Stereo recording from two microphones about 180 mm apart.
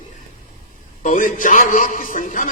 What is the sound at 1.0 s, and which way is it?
A man's voice, 45° left (ahead or behind).